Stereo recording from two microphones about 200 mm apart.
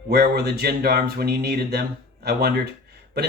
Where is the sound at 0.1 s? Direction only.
55° right (ahead or behind).